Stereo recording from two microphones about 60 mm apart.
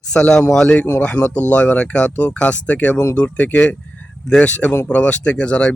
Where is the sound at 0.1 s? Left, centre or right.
Centre.